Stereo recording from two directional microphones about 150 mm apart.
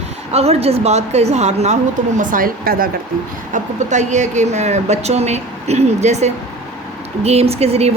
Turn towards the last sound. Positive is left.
turn(degrees=-45)  # may be behind; listen again after turning